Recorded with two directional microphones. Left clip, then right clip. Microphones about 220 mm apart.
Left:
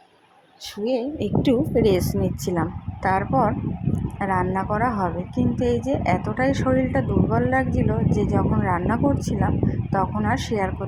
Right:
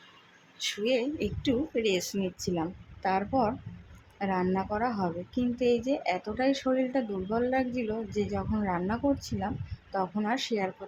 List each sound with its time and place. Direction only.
0.9 s a woman's voice: 10° left (ahead or behind)
1.4 s a woman's voice: 25° left (ahead or behind)
2.6 s a woman's voice: 10° left (ahead or behind)